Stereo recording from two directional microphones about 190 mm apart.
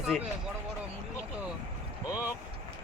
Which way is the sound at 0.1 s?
5° left (ahead or behind).